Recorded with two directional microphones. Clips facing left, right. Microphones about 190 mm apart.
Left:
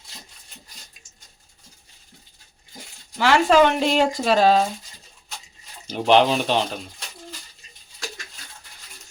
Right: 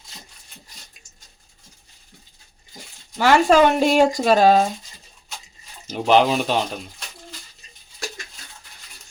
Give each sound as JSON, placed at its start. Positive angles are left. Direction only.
{"t": 3.2, "sound": "speech", "side_deg": -45}
{"t": 5.9, "sound": "speech", "side_deg": -5}